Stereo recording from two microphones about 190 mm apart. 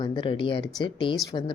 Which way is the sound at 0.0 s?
25° left (ahead or behind).